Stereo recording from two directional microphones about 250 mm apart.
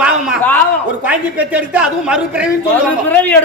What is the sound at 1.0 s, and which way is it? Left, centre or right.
A woman's voice, centre.